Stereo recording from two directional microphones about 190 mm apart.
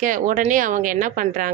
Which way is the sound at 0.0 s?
45° right (ahead or behind).